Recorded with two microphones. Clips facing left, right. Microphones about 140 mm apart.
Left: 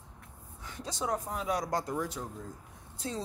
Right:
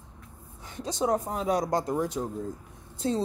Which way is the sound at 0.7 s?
20° right (ahead or behind).